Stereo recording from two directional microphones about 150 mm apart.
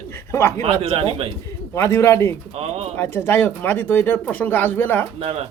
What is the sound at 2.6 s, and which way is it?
Speech, 45° right (ahead or behind).